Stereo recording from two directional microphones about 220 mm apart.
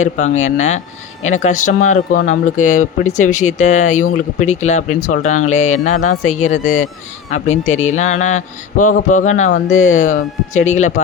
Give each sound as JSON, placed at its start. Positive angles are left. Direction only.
{"t": 0.0, "sound": "speech", "side_deg": 35}